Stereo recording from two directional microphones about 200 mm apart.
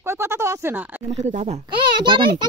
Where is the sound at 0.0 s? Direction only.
15° right (ahead or behind).